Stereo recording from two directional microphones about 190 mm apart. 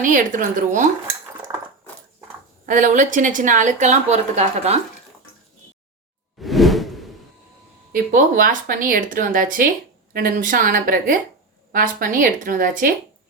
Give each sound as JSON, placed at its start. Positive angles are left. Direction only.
{"t": 0.0, "sound": "speech", "side_deg": -45}
{"t": 1.5, "sound": "a sound", "side_deg": -20}
{"t": 2.6, "sound": "a woman's voice", "side_deg": -40}
{"t": 6.4, "sound": "whoosh", "side_deg": 0}
{"t": 7.9, "sound": "speech", "side_deg": -45}